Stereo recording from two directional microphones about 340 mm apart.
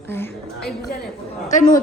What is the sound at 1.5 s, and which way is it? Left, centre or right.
Speech, left.